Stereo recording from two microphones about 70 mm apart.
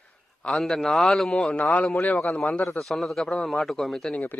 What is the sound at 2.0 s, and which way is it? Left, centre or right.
Speech, left.